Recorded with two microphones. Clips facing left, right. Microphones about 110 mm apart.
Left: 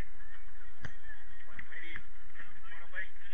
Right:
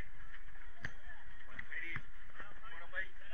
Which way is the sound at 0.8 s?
25° left (ahead or behind).